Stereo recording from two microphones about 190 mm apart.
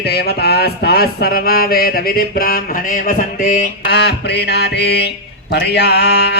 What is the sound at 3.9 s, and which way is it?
Music, 60° left (ahead or behind).